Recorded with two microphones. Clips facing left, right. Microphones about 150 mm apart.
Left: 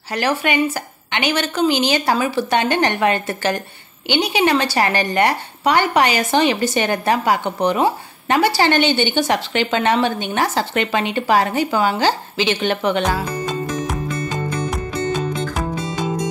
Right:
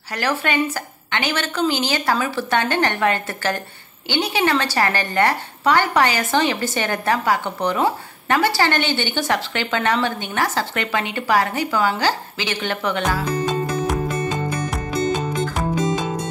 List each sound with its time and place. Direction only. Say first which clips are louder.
0.1 s a woman's voice: left 3 dB; 20° left (ahead or behind)